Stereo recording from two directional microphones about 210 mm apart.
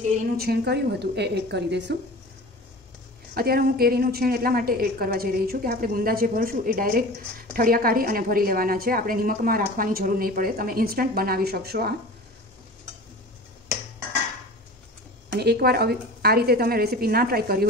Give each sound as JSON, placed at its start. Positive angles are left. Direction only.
{"t": 0.4, "sound": "a woman's voice", "side_deg": -50}
{"t": 3.3, "sound": "a woman's voice", "side_deg": -45}
{"t": 15.3, "sound": "a woman's voice", "side_deg": -50}